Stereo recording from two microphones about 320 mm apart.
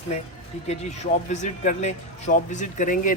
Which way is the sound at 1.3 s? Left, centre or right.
Left.